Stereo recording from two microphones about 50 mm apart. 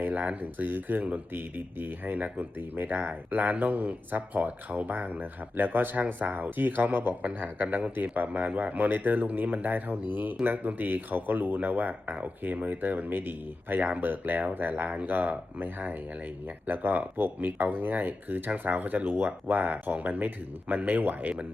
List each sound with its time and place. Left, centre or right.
0.0 s speech: right